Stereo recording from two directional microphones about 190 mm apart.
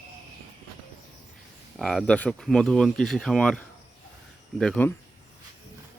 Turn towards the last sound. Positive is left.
turn(degrees=5)  # may be behind; listen again after turning